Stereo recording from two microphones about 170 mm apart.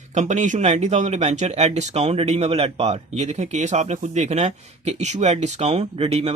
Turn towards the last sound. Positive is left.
turn(degrees=-35)  # may be behind; listen again after turning